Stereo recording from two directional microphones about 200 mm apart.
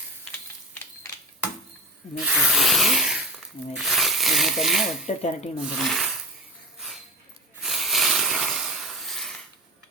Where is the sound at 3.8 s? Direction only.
Centre (ahead or behind).